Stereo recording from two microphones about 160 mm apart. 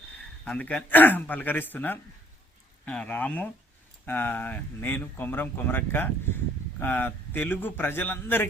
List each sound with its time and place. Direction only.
0.4 s speech: 5° left (ahead or behind)